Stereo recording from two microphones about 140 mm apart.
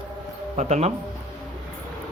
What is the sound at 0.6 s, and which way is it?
Speech, 50° right (ahead or behind).